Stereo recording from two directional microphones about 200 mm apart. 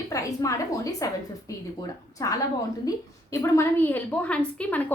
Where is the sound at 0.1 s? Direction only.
15° left (ahead or behind).